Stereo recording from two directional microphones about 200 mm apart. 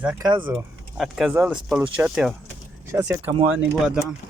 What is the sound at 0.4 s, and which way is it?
Speech, 5° right (ahead or behind).